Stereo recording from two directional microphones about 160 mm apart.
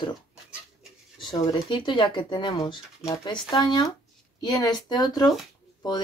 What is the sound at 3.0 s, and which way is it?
Speech, 20° left (ahead or behind).